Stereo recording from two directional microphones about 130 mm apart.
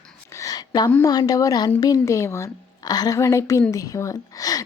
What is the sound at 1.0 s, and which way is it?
Speech, 25° left (ahead or behind).